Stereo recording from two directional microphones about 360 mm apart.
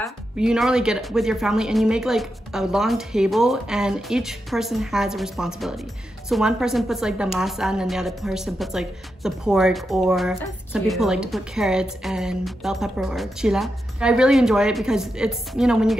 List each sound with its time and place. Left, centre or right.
0.0 s a woman's voice: centre